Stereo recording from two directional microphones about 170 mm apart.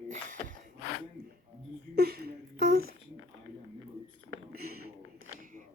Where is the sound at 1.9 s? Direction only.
65° right (ahead or behind).